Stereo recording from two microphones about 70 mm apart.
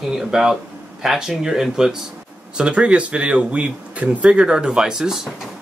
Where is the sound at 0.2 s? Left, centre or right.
Centre.